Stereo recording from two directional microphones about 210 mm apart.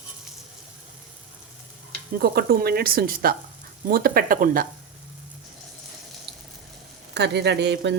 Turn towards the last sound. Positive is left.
turn(degrees=-55)  # may be behind; listen again after turning